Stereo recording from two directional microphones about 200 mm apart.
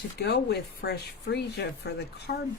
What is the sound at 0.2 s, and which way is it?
Speech, 55° left (ahead or behind).